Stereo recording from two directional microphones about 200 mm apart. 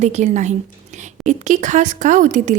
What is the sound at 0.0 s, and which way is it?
A woman's voice, 35° right (ahead or behind).